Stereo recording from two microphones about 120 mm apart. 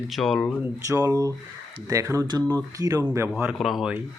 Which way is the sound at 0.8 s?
25° right (ahead or behind).